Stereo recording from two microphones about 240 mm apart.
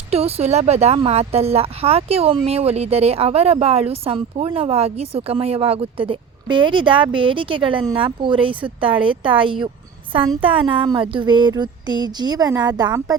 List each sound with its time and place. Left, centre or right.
0.1 s speech: right